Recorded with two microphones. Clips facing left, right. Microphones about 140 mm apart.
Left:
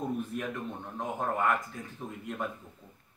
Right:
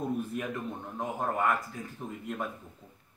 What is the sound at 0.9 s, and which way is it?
Speech, 5° right (ahead or behind).